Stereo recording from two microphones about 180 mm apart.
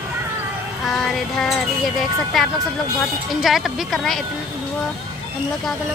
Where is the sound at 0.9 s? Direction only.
Centre (ahead or behind).